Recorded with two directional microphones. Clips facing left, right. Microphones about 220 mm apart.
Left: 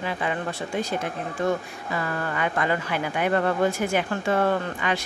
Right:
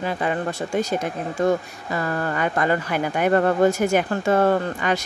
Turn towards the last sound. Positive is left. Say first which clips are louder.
# right 4 dB
turn(degrees=-45)  # may be behind; listen again after turning